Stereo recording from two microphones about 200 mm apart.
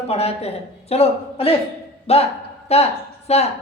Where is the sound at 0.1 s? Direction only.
30° left (ahead or behind).